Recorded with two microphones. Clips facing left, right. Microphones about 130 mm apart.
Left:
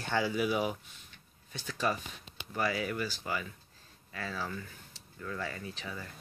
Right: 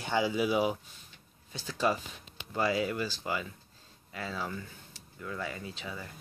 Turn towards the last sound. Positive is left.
turn(degrees=-20)  # may be behind; listen again after turning